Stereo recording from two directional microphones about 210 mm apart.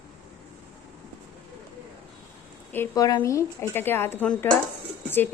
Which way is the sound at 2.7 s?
15° left (ahead or behind).